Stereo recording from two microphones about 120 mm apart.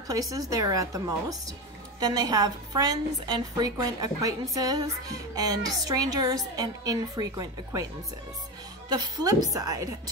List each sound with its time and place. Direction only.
0.1 s a woman's voice: 30° right (ahead or behind)
8.8 s a woman's voice: 35° right (ahead or behind)